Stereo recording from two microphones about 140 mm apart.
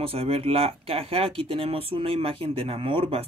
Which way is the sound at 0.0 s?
45° right (ahead or behind).